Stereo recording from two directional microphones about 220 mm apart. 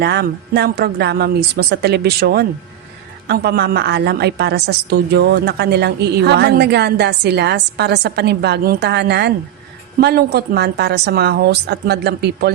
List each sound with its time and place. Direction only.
0.0 s a woman's voice: 45° right (ahead or behind)